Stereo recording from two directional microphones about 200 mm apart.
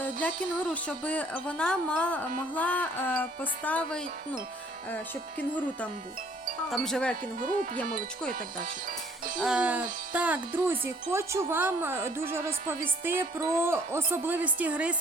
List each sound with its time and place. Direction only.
0.0 s speech: 5° left (ahead or behind)
6.7 s wind chime: centre (ahead or behind)
7.3 s speech: 40° right (ahead or behind)
8.6 s music: 45° right (ahead or behind)
9.4 s wind chime: 5° right (ahead or behind)
10.1 s speech: 5° right (ahead or behind)